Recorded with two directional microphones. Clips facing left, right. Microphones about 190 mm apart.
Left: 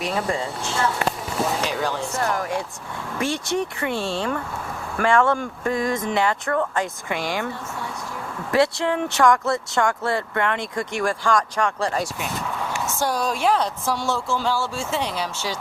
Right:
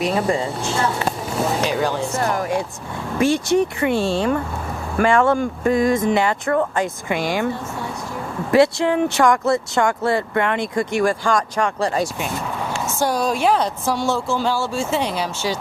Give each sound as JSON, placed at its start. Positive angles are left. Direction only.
{"t": 0.0, "sound": "speech", "side_deg": -25}
{"t": 13.0, "sound": "speech", "side_deg": -25}